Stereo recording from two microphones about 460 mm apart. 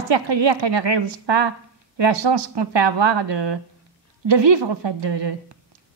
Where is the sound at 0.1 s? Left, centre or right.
Right.